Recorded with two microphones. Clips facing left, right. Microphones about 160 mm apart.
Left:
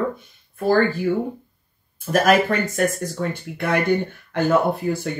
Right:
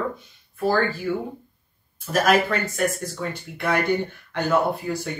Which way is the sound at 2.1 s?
50° left (ahead or behind).